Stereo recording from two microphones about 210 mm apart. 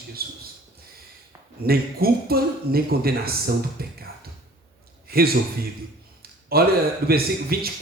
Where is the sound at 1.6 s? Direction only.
45° right (ahead or behind).